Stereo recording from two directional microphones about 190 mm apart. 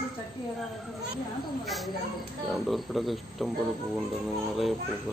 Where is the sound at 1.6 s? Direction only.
Centre (ahead or behind).